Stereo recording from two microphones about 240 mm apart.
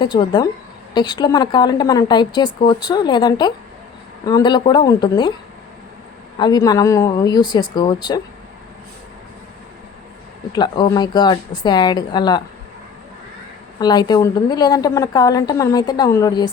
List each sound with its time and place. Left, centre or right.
0.0 s a woman's voice: centre
6.3 s a woman's voice: centre
10.5 s a woman's voice: centre
13.7 s a woman's voice: centre